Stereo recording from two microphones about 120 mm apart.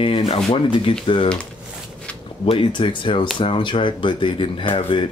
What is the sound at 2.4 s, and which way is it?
Speech, 45° left (ahead or behind).